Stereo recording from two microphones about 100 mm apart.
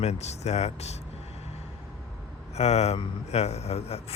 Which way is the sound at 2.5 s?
90° left.